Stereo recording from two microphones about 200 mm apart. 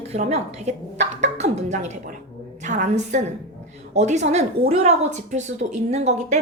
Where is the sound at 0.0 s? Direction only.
30° right (ahead or behind).